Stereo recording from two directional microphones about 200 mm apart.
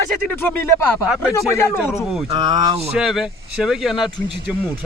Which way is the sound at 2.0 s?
Centre (ahead or behind).